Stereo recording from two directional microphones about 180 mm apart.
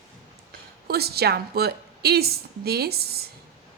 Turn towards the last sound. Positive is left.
turn(degrees=-60)  # may be behind; listen again after turning